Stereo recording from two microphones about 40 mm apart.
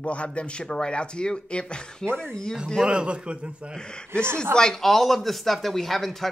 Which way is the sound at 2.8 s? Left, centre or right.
Right.